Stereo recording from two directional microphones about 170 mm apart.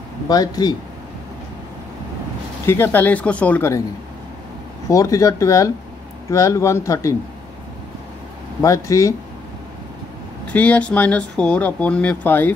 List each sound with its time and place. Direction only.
0.3 s speech: 20° left (ahead or behind)
2.6 s speech: 15° left (ahead or behind)
4.8 s speech: 20° left (ahead or behind)
8.6 s speech: 20° left (ahead or behind)
10.5 s speech: 10° left (ahead or behind)